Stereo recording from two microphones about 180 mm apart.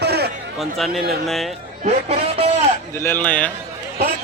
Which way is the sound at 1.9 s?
35° right (ahead or behind).